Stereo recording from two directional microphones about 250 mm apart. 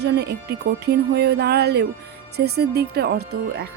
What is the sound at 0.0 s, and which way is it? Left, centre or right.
A woman's voice, right.